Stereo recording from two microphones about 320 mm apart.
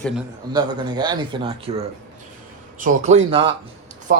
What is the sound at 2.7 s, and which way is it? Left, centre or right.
A man's voice, right.